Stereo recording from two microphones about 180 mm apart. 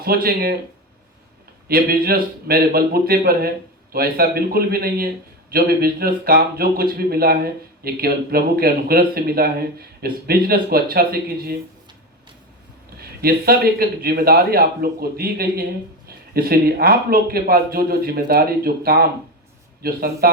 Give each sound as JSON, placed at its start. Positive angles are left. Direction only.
{"t": 0.0, "sound": "a man's voice", "side_deg": -55}
{"t": 1.6, "sound": "a man's voice", "side_deg": -55}
{"t": 13.0, "sound": "a man's voice", "side_deg": -60}